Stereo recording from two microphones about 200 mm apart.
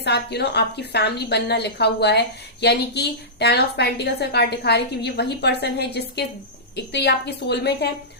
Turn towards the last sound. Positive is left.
turn(degrees=55)  # may be behind; listen again after turning